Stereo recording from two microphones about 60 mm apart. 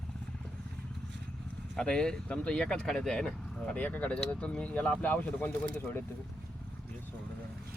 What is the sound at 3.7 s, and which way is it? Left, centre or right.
Speech, left.